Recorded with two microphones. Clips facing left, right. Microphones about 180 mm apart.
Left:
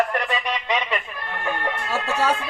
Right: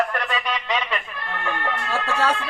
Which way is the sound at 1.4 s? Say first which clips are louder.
Left 1 dB; 15° left (ahead or behind).